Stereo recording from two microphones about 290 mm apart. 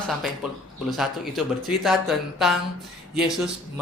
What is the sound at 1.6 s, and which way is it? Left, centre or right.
Speech, centre.